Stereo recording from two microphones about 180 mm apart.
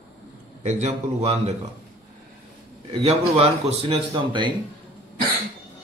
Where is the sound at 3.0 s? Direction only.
35° right (ahead or behind).